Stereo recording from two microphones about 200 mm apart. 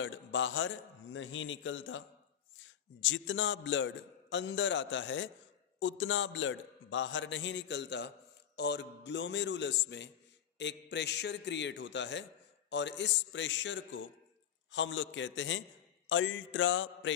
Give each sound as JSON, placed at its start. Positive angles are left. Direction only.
{"t": 0.0, "sound": "a man's voice", "side_deg": 70}